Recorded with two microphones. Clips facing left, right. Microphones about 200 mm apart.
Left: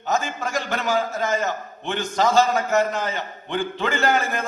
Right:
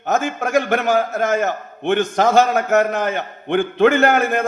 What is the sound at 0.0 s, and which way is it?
A man's voice, 55° right (ahead or behind).